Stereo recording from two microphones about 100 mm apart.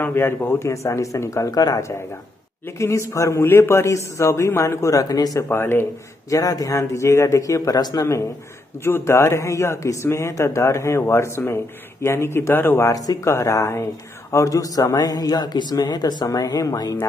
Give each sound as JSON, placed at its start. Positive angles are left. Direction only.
{"t": 0.0, "sound": "a man's voice", "side_deg": 25}
{"t": 5.5, "sound": "a man's voice", "side_deg": 25}
{"t": 6.3, "sound": "a man's voice", "side_deg": 35}